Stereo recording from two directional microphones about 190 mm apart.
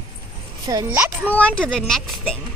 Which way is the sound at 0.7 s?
20° right (ahead or behind).